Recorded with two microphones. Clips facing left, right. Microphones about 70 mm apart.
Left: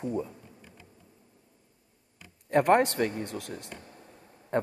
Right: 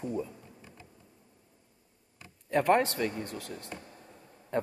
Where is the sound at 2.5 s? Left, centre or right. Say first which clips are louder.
Left 3 dB; left.